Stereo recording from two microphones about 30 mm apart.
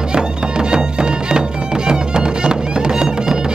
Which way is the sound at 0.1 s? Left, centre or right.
Right.